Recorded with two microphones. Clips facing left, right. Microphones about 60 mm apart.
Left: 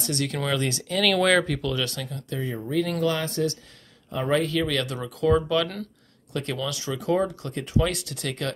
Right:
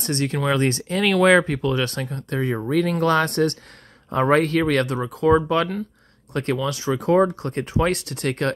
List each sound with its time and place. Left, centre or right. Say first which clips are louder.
0.0 s speech: right 4 dB; right